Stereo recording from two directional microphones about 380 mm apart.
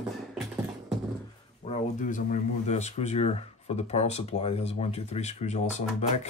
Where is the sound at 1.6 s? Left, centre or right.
Centre.